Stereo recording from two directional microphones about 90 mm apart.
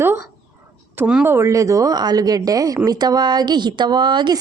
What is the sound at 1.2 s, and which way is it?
A woman's voice, 30° right (ahead or behind).